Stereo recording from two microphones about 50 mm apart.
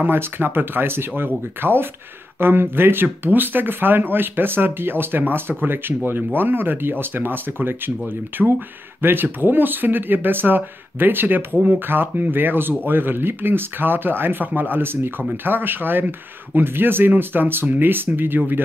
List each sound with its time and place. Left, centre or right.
0.0 s speech: right